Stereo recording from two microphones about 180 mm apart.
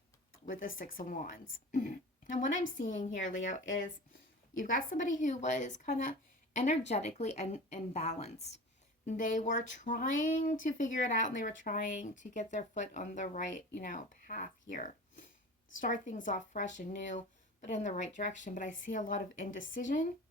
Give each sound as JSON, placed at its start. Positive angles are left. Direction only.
{"t": 0.8, "sound": "speech", "side_deg": 50}